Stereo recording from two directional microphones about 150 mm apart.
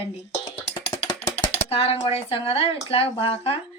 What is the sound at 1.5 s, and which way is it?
A woman's voice, 40° left (ahead or behind).